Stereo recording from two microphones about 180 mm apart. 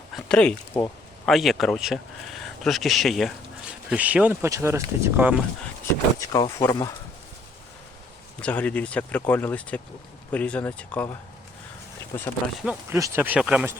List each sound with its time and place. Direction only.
0.3 s speech: 5° left (ahead or behind)
6.1 s speech: 20° left (ahead or behind)
8.4 s speech: 5° left (ahead or behind)
12.1 s speech: 15° left (ahead or behind)
12.6 s speech: 15° right (ahead or behind)